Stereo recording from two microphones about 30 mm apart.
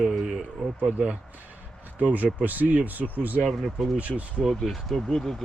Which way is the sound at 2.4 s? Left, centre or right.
Right.